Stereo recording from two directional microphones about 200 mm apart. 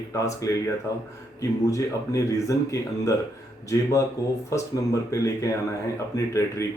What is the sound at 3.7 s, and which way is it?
Speech, 15° left (ahead or behind).